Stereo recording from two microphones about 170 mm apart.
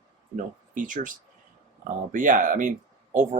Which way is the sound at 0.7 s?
50° right (ahead or behind).